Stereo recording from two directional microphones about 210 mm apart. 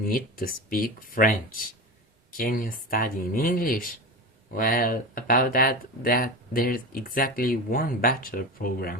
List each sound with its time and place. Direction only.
0.0 s speech: 40° left (ahead or behind)